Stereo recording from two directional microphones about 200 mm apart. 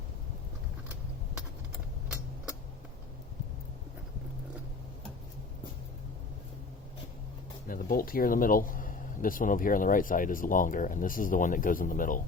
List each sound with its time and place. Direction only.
7.7 s speech: 45° left (ahead or behind)